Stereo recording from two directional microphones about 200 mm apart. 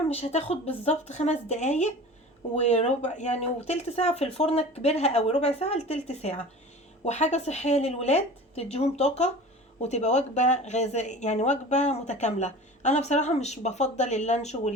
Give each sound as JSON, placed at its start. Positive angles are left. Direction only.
{"t": 0.1, "sound": "speech", "side_deg": 30}